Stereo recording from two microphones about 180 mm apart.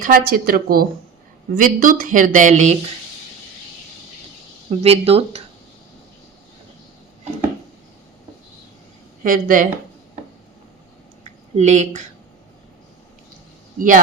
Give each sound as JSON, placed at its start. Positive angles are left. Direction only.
{"t": 0.0, "sound": "speech", "side_deg": -55}
{"t": 4.7, "sound": "speech", "side_deg": -35}
{"t": 9.2, "sound": "speech", "side_deg": -50}
{"t": 11.5, "sound": "speech", "side_deg": -40}
{"t": 13.7, "sound": "speech", "side_deg": -50}